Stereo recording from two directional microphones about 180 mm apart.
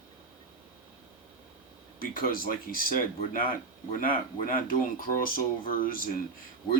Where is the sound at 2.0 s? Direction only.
50° left (ahead or behind).